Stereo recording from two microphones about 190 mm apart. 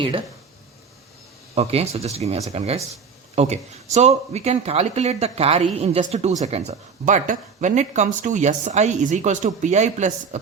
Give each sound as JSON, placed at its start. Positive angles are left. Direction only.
{"t": 1.5, "sound": "speech", "side_deg": -30}